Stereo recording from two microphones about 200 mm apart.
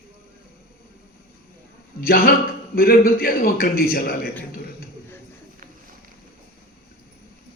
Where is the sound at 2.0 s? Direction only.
50° left (ahead or behind).